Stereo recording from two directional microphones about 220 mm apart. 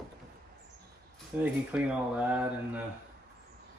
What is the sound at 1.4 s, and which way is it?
Speech, 5° right (ahead or behind).